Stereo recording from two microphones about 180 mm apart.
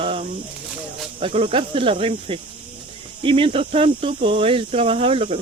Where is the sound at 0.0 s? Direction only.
35° right (ahead or behind).